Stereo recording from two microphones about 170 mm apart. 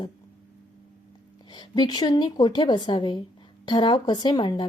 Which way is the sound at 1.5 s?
25° left (ahead or behind).